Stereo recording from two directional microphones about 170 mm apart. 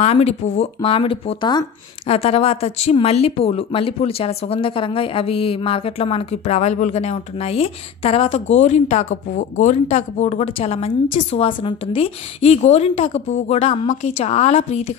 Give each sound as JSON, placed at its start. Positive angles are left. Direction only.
{"t": 0.0, "sound": "a woman's voice", "side_deg": 40}